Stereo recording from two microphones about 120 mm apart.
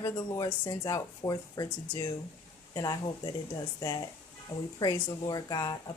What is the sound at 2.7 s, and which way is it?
Speech, 30° left (ahead or behind).